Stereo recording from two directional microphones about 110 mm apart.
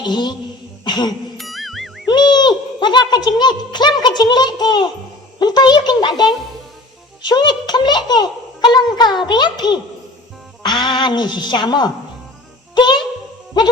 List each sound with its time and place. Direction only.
0.0 s speech: 40° left (ahead or behind)
0.9 s music: 40° left (ahead or behind)
1.4 s music: centre (ahead or behind)
2.0 s a child's voice: 40° left (ahead or behind)